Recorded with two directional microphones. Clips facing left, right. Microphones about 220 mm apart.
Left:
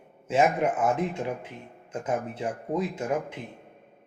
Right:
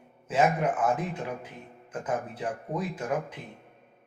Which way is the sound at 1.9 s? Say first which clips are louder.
Left 2 dB; 25° left (ahead or behind).